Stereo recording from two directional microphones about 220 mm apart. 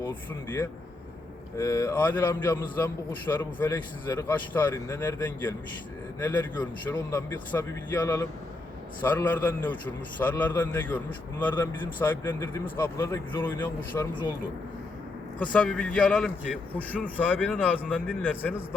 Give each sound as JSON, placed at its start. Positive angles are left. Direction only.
{"t": 1.5, "sound": "a man's voice", "side_deg": 15}
{"t": 15.5, "sound": "a man's voice", "side_deg": 5}